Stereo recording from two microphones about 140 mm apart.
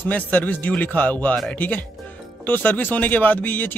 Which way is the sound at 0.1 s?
10° left (ahead or behind).